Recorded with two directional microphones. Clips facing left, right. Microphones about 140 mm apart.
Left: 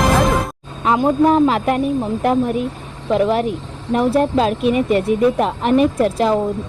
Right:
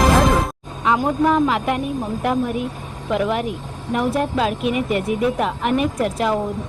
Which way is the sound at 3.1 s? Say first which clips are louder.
Left 5 dB; 35° left (ahead or behind).